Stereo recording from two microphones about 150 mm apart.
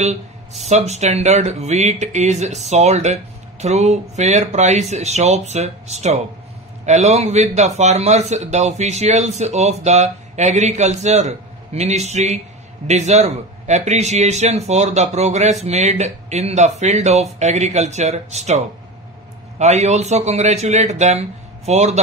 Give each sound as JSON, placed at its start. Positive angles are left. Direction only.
{"t": 0.0, "sound": "a sound", "side_deg": -50}
{"t": 0.7, "sound": "a man's voice", "side_deg": -45}
{"t": 19.6, "sound": "a man's voice", "side_deg": -50}